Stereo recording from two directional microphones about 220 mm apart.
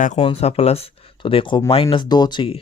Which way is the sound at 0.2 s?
25° left (ahead or behind).